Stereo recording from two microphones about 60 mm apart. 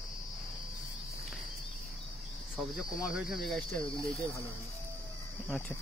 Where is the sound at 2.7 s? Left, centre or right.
Centre.